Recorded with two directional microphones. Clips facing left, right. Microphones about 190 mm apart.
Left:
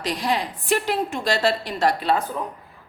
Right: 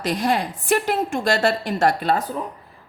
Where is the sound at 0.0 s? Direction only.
45° right (ahead or behind).